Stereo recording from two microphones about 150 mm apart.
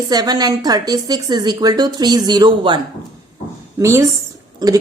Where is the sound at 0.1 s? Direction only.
25° right (ahead or behind).